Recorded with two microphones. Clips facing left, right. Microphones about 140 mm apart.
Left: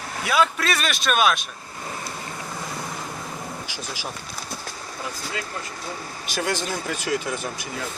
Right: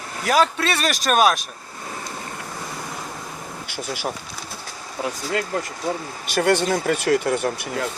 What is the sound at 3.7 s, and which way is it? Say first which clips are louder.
Speech: right 6 dB; 60° right (ahead or behind).